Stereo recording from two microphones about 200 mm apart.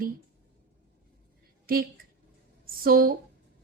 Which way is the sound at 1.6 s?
45° right (ahead or behind).